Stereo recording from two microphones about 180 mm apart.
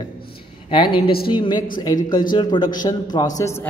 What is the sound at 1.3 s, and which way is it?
A man's voice, 25° left (ahead or behind).